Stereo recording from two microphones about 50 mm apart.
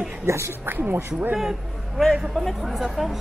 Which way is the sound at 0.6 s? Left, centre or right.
Right.